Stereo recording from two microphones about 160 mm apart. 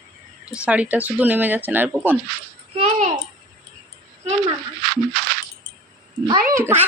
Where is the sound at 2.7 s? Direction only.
45° right (ahead or behind).